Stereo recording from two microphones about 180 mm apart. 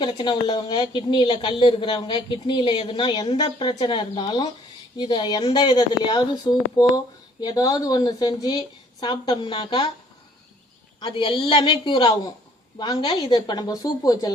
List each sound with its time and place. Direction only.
0.0 s a woman's voice: 25° left (ahead or behind)
11.0 s a woman's voice: 30° left (ahead or behind)